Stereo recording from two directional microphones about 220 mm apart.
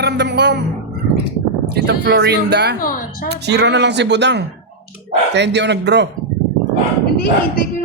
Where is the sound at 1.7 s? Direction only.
50° right (ahead or behind).